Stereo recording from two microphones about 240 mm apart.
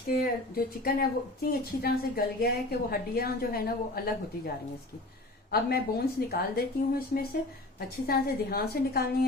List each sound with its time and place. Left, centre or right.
0.1 s a woman's voice: left
5.5 s a woman's voice: left